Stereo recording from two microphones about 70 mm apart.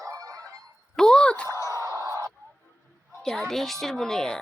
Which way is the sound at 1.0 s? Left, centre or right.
Centre.